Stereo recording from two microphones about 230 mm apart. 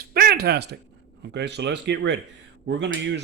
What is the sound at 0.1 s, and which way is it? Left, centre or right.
Speech, right.